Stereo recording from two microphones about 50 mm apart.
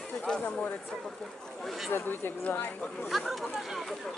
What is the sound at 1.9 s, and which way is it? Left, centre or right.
Speech, left.